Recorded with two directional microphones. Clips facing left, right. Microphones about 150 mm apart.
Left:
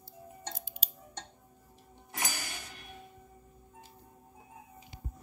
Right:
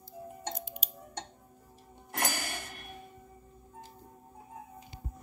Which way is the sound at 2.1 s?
60° right (ahead or behind).